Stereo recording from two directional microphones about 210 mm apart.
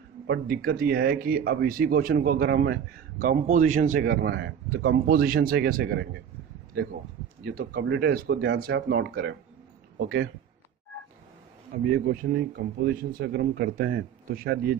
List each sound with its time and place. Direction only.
0.3 s speech: 45° right (ahead or behind)
7.4 s speech: 50° right (ahead or behind)
11.7 s speech: 40° right (ahead or behind)